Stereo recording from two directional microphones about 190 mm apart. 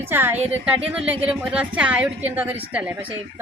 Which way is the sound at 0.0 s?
10° right (ahead or behind).